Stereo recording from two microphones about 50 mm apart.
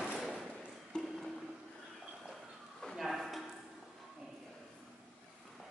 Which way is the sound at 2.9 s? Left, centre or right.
Centre.